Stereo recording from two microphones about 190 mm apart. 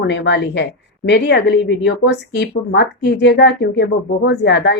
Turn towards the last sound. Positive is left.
turn(degrees=65)  # may be behind; listen again after turning